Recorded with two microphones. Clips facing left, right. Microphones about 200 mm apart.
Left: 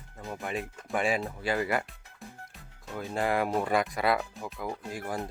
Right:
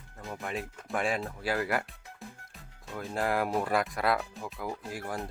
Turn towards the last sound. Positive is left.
turn(degrees=0)  # may be behind; listen again after turning